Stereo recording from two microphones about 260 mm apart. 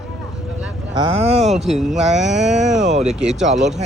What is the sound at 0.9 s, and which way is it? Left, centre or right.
Speech, right.